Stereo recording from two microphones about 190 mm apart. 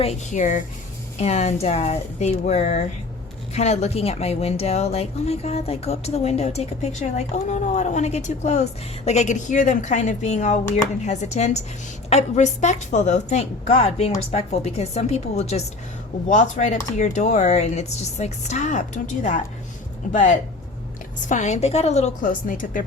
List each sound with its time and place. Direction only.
0.0 s speech: 35° left (ahead or behind)
21.2 s speech: 40° left (ahead or behind)